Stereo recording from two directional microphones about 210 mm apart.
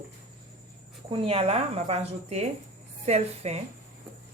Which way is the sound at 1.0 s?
25° right (ahead or behind).